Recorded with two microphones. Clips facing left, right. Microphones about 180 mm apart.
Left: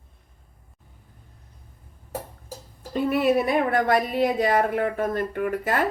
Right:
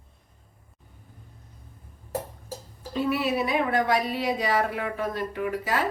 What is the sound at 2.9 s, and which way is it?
A woman's voice, 50° left (ahead or behind).